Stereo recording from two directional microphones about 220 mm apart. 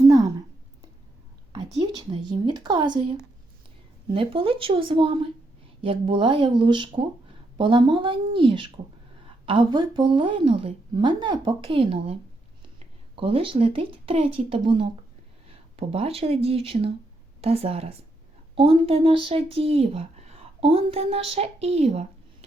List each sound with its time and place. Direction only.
1.5 s a sound: 20° right (ahead or behind)
4.1 s a woman's voice: 25° right (ahead or behind)
13.1 s a woman's voice: 25° right (ahead or behind)